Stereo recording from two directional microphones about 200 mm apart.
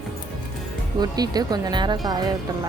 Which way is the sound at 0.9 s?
20° right (ahead or behind).